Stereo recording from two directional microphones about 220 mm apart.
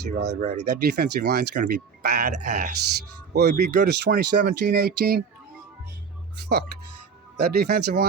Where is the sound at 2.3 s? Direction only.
35° right (ahead or behind).